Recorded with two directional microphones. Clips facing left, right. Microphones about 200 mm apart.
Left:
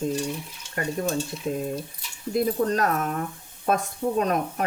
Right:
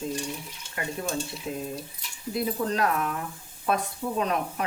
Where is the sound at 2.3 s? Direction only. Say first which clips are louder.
Left 5 dB; 45° left (ahead or behind).